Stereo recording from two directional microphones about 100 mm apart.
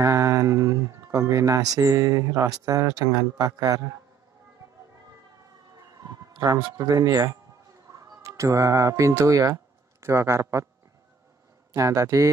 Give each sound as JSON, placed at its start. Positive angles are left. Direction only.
{"t": 0.0, "sound": "speech", "side_deg": -30}
{"t": 5.8, "sound": "siren", "side_deg": -35}
{"t": 6.4, "sound": "speech", "side_deg": -35}
{"t": 11.7, "sound": "speech", "side_deg": -35}